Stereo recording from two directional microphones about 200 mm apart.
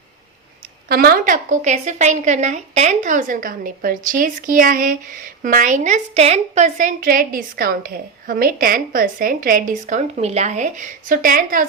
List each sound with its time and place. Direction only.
0.9 s a woman's voice: 50° right (ahead or behind)